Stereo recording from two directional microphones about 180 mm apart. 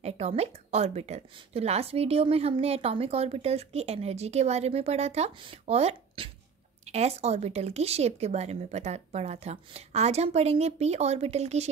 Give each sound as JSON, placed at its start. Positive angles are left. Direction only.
{"t": 0.0, "sound": "a woman's voice", "side_deg": -35}